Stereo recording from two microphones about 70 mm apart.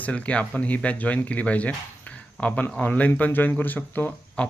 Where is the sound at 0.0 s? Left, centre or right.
Centre.